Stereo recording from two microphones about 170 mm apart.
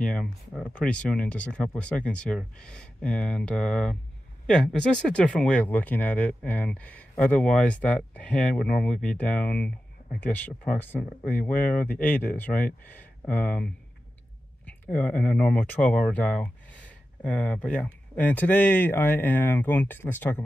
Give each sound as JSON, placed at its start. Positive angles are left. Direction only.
{"t": 0.0, "sound": "speech", "side_deg": 5}
{"t": 14.7, "sound": "speech", "side_deg": 10}